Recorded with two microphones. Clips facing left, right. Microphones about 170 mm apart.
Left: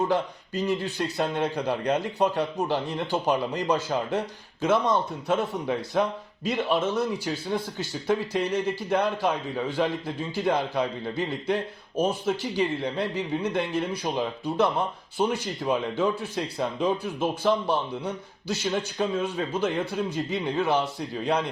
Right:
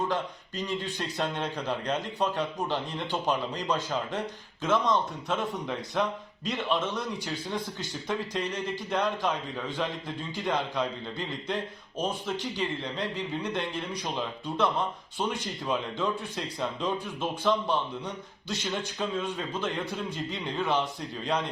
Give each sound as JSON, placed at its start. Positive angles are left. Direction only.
{"t": 0.1, "sound": "speech", "side_deg": 10}